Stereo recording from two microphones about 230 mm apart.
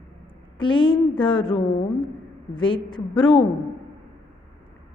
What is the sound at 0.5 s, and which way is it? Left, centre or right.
Speech, left.